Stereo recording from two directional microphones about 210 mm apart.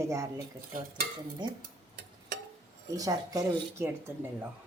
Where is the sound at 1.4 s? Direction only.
20° right (ahead or behind).